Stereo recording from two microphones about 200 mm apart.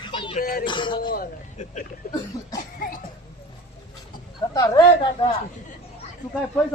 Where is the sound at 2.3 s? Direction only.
15° left (ahead or behind).